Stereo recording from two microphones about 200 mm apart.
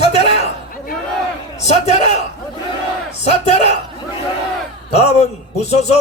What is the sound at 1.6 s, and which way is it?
Speech, 35° left (ahead or behind).